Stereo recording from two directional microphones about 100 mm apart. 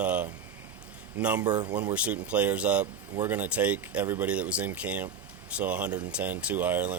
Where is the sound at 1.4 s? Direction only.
40° right (ahead or behind).